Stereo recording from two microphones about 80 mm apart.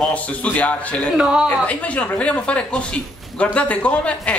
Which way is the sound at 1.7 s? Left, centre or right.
Centre.